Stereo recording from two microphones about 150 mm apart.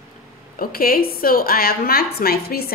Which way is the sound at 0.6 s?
80° left.